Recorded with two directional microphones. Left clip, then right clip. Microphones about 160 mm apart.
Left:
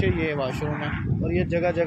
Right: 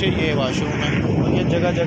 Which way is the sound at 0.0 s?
20° right (ahead or behind).